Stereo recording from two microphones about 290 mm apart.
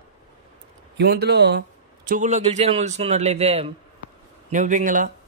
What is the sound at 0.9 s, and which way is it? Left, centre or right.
Speech, right.